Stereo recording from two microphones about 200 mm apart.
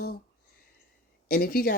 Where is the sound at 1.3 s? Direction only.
50° left (ahead or behind).